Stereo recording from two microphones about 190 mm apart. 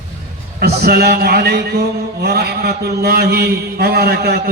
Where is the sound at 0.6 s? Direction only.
55° right (ahead or behind).